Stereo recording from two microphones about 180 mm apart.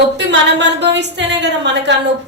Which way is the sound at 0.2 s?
75° right (ahead or behind).